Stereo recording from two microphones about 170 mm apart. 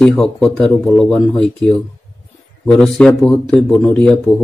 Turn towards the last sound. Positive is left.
turn(degrees=5)  # may be behind; listen again after turning